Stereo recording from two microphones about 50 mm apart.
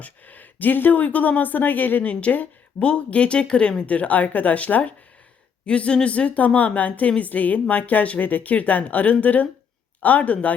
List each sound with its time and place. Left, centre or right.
0.0 s speech: left